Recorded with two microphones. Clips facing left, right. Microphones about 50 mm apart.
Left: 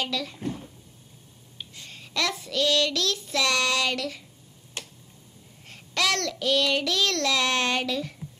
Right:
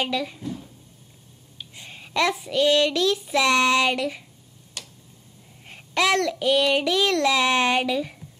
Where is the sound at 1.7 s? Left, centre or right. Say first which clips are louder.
Right 6 dB; centre.